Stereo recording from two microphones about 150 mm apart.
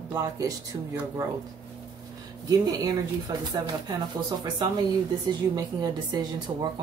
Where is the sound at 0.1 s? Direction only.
25° right (ahead or behind).